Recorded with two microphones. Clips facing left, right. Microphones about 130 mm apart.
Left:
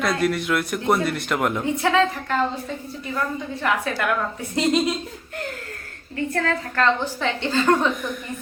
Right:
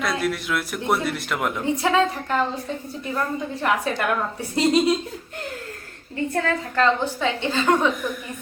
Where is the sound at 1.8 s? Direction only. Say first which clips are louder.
Left 1 dB; 10° right (ahead or behind).